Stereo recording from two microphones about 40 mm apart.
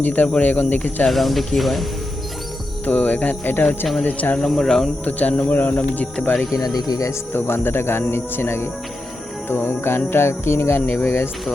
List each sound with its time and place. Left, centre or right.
0.0 s speech: left
1.0 s speech: centre
2.8 s speech: left
3.4 s speech: left
4.0 s speech: left
4.4 s speech: centre
5.4 s speech: left
7.3 s speech: left
8.1 s music: left
9.5 s speech: left
10.1 s music: left
10.8 s speech: left